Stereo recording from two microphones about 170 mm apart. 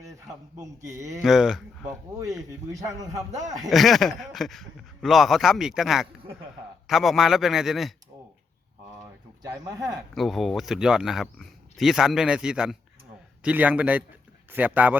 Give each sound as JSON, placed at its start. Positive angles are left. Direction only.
{"t": 0.6, "sound": "a man's voice", "side_deg": -20}
{"t": 1.2, "sound": "speech", "side_deg": 0}
{"t": 2.8, "sound": "a man's voice", "side_deg": -20}
{"t": 3.7, "sound": "speech", "side_deg": 0}
{"t": 9.6, "sound": "a man's voice", "side_deg": -20}
{"t": 10.2, "sound": "a man's voice", "side_deg": 0}